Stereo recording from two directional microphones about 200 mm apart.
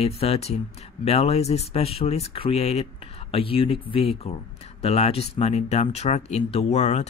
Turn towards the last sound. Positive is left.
turn(degrees=35)  # may be behind; listen again after turning